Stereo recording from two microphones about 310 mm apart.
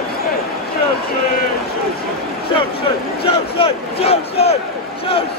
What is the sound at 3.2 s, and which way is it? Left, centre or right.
Battle cry, centre.